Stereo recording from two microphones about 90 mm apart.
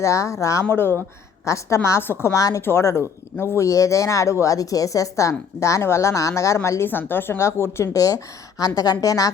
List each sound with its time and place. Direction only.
0.0 s a woman's voice: 35° left (ahead or behind)
2.3 s a woman's voice: 35° left (ahead or behind)